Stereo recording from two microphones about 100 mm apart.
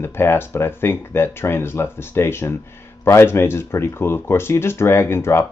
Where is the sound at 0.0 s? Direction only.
25° left (ahead or behind).